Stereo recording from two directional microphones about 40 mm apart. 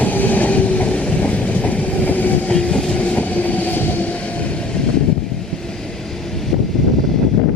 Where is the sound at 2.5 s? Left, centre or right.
Left.